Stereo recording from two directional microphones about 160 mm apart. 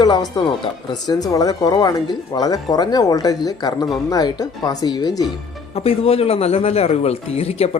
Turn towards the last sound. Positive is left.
turn(degrees=40)  # may be behind; listen again after turning